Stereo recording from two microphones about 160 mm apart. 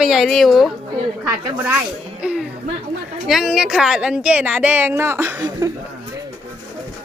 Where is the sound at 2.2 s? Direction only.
5° right (ahead or behind).